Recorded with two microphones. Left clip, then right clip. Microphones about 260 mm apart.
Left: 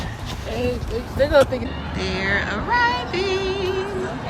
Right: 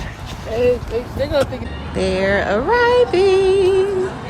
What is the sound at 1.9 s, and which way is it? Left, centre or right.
Music, centre.